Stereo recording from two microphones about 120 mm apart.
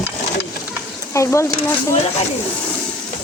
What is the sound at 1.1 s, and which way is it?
Speech, 25° left (ahead or behind).